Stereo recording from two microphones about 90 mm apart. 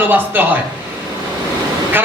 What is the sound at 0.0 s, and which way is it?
Speech, 20° right (ahead or behind).